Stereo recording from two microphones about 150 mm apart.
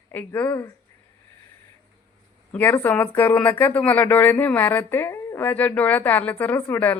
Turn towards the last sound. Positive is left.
turn(degrees=10)  # may be behind; listen again after turning